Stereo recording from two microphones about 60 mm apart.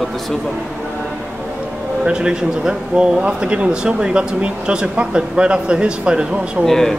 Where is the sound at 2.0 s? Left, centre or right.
Centre.